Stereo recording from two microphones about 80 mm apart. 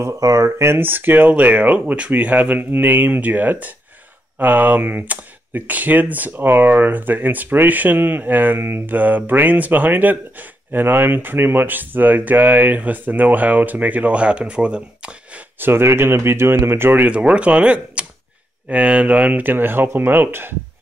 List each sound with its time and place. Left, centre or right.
0.0 s speech: right; by 15.4 s centre
15.6 s speech: right